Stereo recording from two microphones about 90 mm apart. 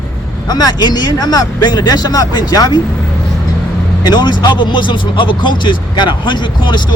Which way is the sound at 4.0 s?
55° left (ahead or behind).